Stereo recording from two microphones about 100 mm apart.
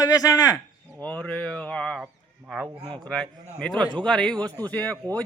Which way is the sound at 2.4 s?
15° right (ahead or behind).